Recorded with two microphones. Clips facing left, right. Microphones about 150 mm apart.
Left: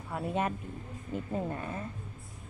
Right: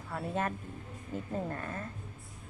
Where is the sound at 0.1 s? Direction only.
15° left (ahead or behind).